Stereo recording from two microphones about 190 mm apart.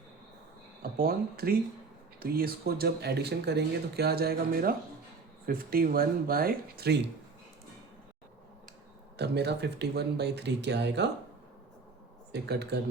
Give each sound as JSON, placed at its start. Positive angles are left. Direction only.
{"t": 0.8, "sound": "speech", "side_deg": -55}
{"t": 9.1, "sound": "speech", "side_deg": -60}
{"t": 12.3, "sound": "speech", "side_deg": -60}